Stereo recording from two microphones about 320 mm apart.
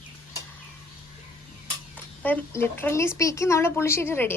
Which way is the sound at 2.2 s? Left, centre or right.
Centre.